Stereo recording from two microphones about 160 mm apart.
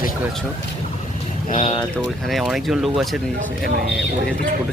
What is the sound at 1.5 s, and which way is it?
Speech, 50° left (ahead or behind).